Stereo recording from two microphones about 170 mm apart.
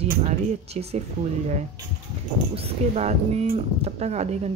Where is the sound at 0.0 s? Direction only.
40° right (ahead or behind).